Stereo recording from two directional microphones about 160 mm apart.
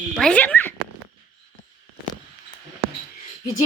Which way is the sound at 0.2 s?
5° left (ahead or behind).